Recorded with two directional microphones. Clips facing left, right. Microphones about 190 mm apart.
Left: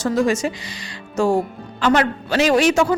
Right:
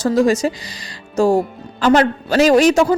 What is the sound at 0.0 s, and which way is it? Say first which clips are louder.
A man's voice: right 4 dB; 35° right (ahead or behind).